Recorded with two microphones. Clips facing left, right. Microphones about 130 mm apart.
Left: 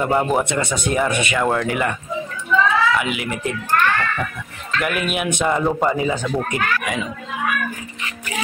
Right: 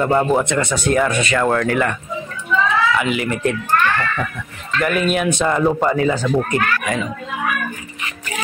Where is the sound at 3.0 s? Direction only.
5° left (ahead or behind).